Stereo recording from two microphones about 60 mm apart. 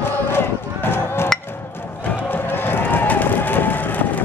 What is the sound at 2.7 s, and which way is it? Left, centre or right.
Run, left.